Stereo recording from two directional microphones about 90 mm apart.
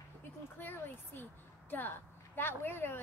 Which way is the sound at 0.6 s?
20° left (ahead or behind).